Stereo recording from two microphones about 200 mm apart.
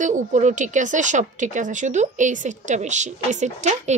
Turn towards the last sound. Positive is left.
turn(degrees=-35)  # may be behind; listen again after turning